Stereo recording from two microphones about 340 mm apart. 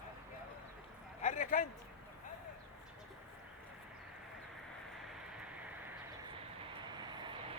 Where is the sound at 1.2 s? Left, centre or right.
Left.